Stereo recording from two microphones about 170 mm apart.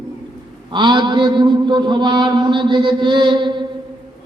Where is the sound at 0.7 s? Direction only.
30° right (ahead or behind).